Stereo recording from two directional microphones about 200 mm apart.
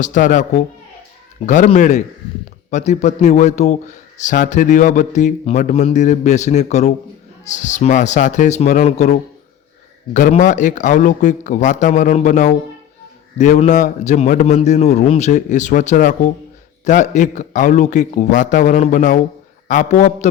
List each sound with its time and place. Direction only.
0.0 s a man's voice: 40° left (ahead or behind)
10.2 s a man's voice: 40° left (ahead or behind)